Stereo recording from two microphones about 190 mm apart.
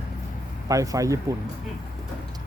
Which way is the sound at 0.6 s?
20° right (ahead or behind).